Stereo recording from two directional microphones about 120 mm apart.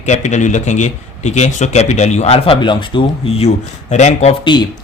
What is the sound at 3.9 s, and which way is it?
Speech, 70° left (ahead or behind).